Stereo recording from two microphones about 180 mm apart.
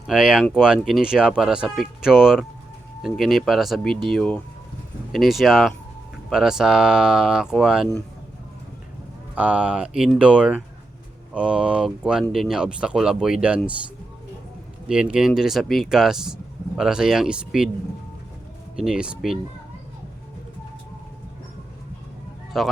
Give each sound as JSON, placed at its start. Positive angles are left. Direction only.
{"t": 0.1, "sound": "speech", "side_deg": -5}
{"t": 9.3, "sound": "speech", "side_deg": -5}
{"t": 14.8, "sound": "speech", "side_deg": -5}
{"t": 18.8, "sound": "speech", "side_deg": -5}
{"t": 22.5, "sound": "speech", "side_deg": 0}